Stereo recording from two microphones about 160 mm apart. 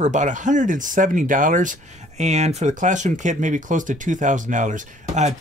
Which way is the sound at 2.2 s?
45° right (ahead or behind).